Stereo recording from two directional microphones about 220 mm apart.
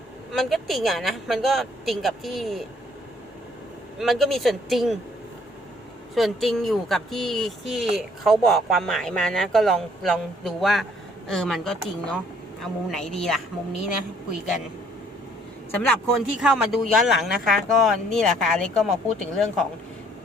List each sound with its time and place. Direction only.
0.3 s speech: centre (ahead or behind)
3.9 s speech: centre (ahead or behind)
6.1 s speech: centre (ahead or behind)
15.7 s speech: 5° left (ahead or behind)